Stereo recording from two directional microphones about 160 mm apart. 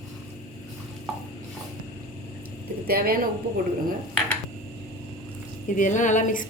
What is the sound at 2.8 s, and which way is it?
Speech, 70° right (ahead or behind).